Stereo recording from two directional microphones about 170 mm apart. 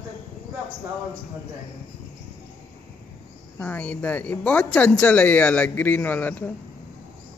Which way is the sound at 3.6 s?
10° left (ahead or behind).